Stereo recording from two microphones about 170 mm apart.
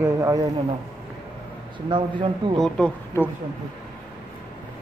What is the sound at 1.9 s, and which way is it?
Speech, 30° right (ahead or behind).